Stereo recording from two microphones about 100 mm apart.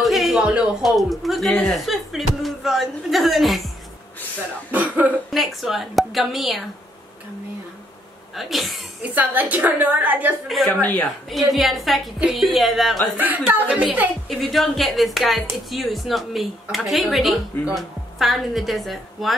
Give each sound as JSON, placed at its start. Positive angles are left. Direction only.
{"t": 0.0, "sound": "speech", "side_deg": 0}
{"t": 4.6, "sound": "a woman's voice", "side_deg": -15}
{"t": 5.3, "sound": "speech", "side_deg": 0}
{"t": 8.4, "sound": "speech", "side_deg": 0}
{"t": 9.1, "sound": "a woman's voice", "side_deg": -15}
{"t": 10.7, "sound": "speech", "side_deg": 20}
{"t": 11.2, "sound": "speech", "side_deg": 0}
{"t": 13.2, "sound": "a woman's voice", "side_deg": -15}
{"t": 14.5, "sound": "speech", "side_deg": 0}